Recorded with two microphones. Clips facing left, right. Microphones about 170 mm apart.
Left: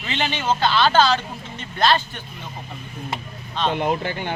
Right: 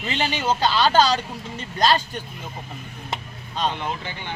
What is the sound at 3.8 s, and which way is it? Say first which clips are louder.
Speech: left 7 dB; 50° left (ahead or behind).